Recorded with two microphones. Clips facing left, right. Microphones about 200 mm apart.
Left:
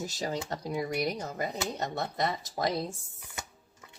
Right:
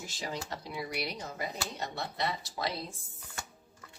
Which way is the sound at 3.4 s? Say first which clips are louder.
Left 2 dB; 20° left (ahead or behind).